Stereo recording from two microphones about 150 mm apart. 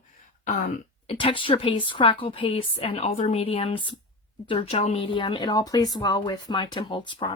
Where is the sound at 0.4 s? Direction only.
55° left (ahead or behind).